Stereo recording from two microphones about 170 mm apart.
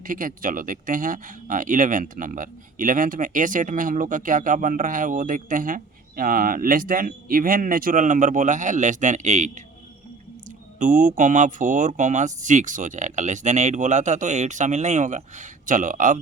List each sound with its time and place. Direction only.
0.0 s speech: 55° right (ahead or behind)
10.8 s speech: 50° right (ahead or behind)